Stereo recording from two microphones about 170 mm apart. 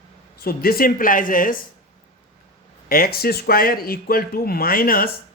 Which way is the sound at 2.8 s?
60° left (ahead or behind).